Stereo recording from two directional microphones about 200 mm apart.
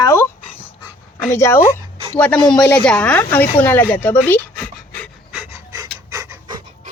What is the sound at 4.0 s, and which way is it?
Pant, 10° left (ahead or behind).